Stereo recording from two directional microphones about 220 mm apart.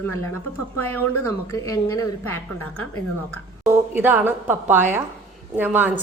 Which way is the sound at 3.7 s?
10° right (ahead or behind).